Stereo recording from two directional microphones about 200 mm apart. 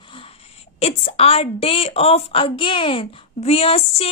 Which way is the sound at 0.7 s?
30° left (ahead or behind).